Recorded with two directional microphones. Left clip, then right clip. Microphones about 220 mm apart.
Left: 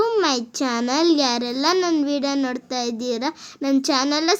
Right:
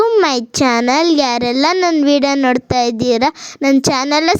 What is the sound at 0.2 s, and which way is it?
A child's voice, 35° right (ahead or behind).